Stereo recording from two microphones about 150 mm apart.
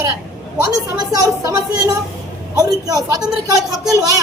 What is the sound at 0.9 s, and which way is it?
A woman's voice, 25° right (ahead or behind).